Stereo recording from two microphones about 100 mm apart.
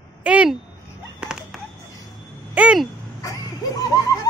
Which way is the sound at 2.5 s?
10° right (ahead or behind).